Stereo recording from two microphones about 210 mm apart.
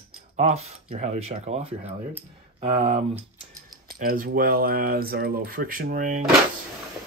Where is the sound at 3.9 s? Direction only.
45° right (ahead or behind).